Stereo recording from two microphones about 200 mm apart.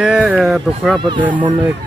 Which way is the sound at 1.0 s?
25° right (ahead or behind).